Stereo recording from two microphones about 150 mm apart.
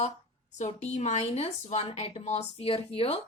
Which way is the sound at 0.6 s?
50° left (ahead or behind).